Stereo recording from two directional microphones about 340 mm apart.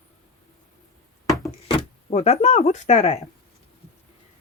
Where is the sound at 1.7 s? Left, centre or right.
Centre.